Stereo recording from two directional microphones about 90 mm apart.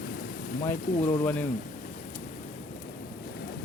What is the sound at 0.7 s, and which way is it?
Speech, 20° left (ahead or behind).